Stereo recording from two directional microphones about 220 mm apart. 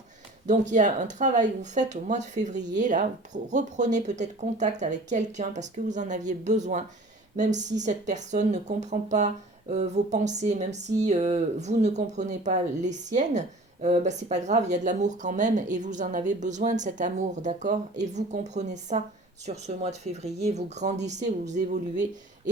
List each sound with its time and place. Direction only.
0.4 s speech: 35° right (ahead or behind)